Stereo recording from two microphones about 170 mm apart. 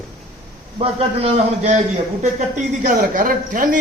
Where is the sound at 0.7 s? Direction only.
40° right (ahead or behind).